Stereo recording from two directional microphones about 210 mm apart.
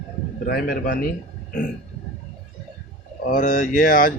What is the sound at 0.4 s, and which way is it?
Speech, 45° left (ahead or behind).